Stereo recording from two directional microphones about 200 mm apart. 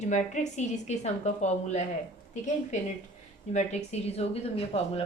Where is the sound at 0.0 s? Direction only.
35° left (ahead or behind).